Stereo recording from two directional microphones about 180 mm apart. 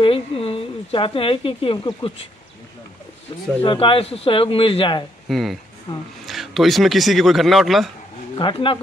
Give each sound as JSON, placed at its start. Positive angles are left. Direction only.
{"t": 0.0, "sound": "speech", "side_deg": 30}
{"t": 3.6, "sound": "speech", "side_deg": 30}
{"t": 5.3, "sound": "speech", "side_deg": 0}
{"t": 8.4, "sound": "speech", "side_deg": 30}